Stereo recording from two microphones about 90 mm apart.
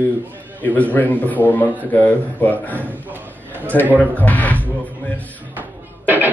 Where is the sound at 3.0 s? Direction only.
20° right (ahead or behind).